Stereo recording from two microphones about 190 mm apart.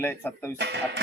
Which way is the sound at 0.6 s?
65° right (ahead or behind).